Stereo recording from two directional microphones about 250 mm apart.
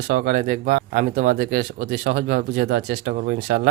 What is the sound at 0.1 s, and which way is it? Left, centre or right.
Speech, right.